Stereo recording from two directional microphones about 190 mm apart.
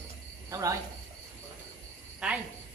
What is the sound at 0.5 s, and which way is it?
Speech, 15° right (ahead or behind).